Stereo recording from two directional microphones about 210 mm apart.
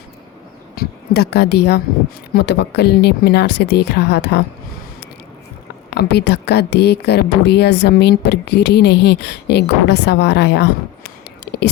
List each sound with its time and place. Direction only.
0.8 s speech: 50° left (ahead or behind)
5.9 s speech: 50° left (ahead or behind)